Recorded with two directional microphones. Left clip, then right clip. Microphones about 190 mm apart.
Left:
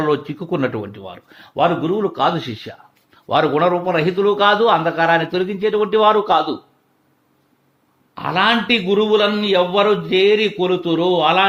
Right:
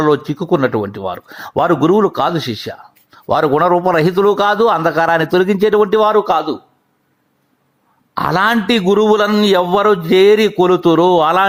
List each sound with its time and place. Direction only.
0.0 s speech: 30° right (ahead or behind)
0.9 s speech: 35° right (ahead or behind)
2.5 s speech: 25° right (ahead or behind)
3.2 s a man's voice: 40° right (ahead or behind)
6.2 s speech: 20° right (ahead or behind)
8.1 s a man's voice: 40° right (ahead or behind)